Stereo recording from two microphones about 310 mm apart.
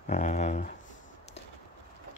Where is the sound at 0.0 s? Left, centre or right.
Left.